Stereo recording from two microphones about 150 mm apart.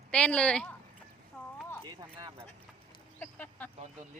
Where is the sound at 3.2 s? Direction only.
10° left (ahead or behind).